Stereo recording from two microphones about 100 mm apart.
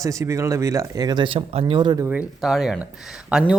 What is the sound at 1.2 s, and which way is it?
Speech, 65° right (ahead or behind).